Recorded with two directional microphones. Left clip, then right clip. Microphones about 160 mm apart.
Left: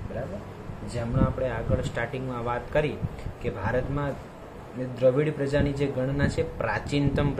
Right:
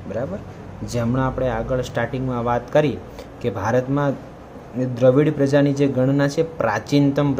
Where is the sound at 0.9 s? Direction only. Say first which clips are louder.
Right 7 dB; 45° right (ahead or behind).